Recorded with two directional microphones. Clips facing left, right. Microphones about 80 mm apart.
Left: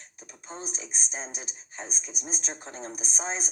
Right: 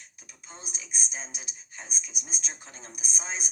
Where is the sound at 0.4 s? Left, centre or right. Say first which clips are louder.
Left 7 dB; left.